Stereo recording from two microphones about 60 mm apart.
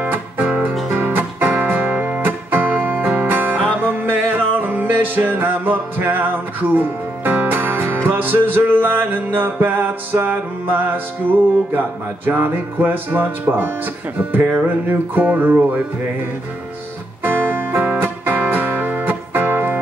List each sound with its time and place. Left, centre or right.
0.0 s music: right